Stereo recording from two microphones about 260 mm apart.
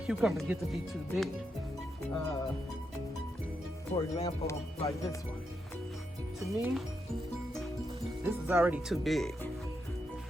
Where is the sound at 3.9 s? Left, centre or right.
Left.